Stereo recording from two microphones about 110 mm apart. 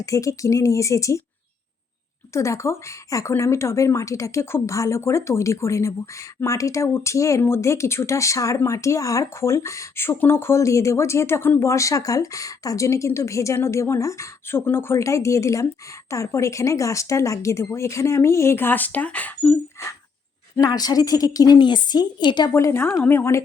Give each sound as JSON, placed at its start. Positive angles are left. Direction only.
{"t": 0.0, "sound": "a woman's voice", "side_deg": 30}
{"t": 2.3, "sound": "a woman's voice", "side_deg": 25}
{"t": 20.6, "sound": "a woman's voice", "side_deg": 35}
{"t": 22.4, "sound": "a woman's voice", "side_deg": 25}